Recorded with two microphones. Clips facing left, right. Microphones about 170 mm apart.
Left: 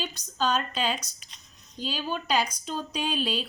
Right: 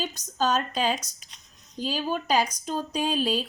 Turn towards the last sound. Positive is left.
turn(degrees=-40)  # may be behind; listen again after turning